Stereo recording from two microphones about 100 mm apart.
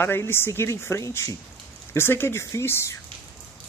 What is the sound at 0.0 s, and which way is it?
Speech, 25° left (ahead or behind).